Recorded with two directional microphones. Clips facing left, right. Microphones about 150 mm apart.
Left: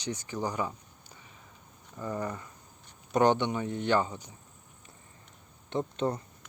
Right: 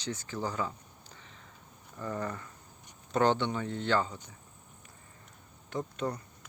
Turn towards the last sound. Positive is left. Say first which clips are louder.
# left 4 dB
turn(degrees=25)  # may be behind; listen again after turning